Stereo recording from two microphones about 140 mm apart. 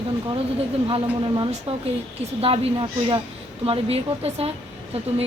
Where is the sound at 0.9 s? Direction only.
35° right (ahead or behind).